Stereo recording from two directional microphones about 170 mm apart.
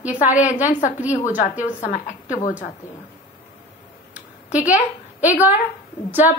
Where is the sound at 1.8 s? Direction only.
45° left (ahead or behind).